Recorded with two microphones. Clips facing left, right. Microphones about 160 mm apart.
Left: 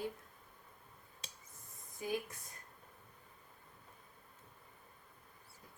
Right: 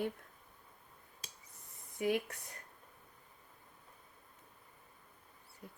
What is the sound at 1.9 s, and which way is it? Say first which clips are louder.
Speech: right 6 dB; 70° right (ahead or behind).